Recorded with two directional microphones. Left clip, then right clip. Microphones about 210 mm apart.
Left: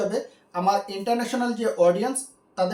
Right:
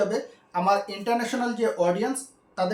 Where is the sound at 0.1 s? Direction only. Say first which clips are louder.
Even; 5° right (ahead or behind).